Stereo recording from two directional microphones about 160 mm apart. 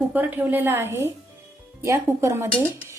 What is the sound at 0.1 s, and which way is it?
A woman's voice, 10° right (ahead or behind).